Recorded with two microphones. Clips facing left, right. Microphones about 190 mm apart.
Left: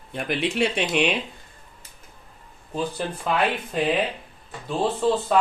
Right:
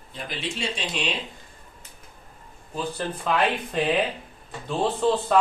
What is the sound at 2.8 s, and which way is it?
Speech, 10° left (ahead or behind).